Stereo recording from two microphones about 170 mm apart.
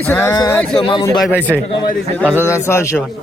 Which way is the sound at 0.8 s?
30° left (ahead or behind).